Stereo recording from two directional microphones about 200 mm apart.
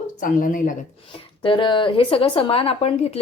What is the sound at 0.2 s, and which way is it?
Speech, 40° left (ahead or behind).